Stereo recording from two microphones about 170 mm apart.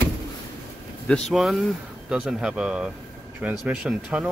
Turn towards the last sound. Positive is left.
turn(degrees=-5)  # may be behind; listen again after turning